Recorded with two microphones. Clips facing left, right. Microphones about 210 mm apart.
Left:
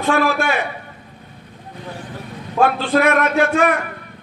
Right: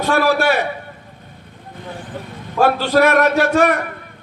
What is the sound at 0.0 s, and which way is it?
Speech, 40° right (ahead or behind).